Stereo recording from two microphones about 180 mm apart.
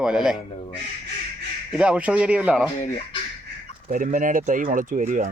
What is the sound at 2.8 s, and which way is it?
Speech, 30° left (ahead or behind).